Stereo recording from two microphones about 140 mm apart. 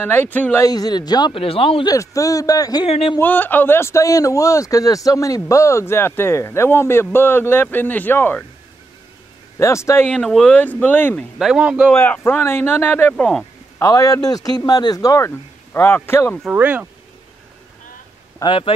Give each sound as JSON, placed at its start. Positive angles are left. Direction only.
{"t": 0.0, "sound": "a man's voice", "side_deg": 15}
{"t": 0.7, "sound": "a man's voice", "side_deg": 30}
{"t": 1.9, "sound": "a man's voice", "side_deg": 25}
{"t": 2.9, "sound": "a man's voice", "side_deg": 45}
{"t": 3.2, "sound": "a man's voice", "side_deg": 15}
{"t": 9.6, "sound": "a man's voice", "side_deg": 20}
{"t": 10.0, "sound": "a man's voice", "side_deg": 0}
{"t": 11.3, "sound": "speech", "side_deg": -5}
{"t": 11.9, "sound": "a man's voice", "side_deg": 15}
{"t": 13.1, "sound": "speech", "side_deg": 5}
{"t": 13.7, "sound": "a man's voice", "side_deg": 25}
{"t": 16.4, "sound": "speech", "side_deg": -10}
{"t": 18.4, "sound": "a man's voice", "side_deg": 40}